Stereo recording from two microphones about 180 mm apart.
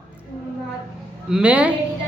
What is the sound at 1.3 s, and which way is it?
Speech, 5° right (ahead or behind).